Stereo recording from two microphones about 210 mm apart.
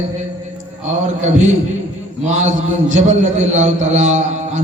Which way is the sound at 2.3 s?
35° right (ahead or behind).